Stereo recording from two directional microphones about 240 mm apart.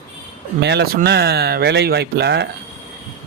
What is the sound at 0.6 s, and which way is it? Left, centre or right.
Speech, right.